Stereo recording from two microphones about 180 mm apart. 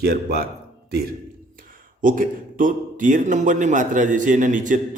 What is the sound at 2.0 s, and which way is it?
A man's voice, 50° right (ahead or behind).